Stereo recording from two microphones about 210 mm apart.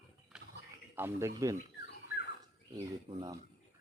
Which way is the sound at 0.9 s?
10° right (ahead or behind).